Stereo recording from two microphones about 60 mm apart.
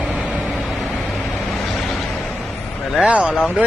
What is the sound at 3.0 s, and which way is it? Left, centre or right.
Speech, right.